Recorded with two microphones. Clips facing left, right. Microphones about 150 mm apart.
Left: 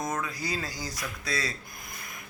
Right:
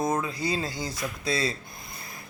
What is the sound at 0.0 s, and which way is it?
Speech, 30° right (ahead or behind).